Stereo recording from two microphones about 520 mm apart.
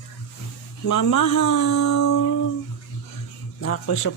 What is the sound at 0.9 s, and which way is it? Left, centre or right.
Speech, left.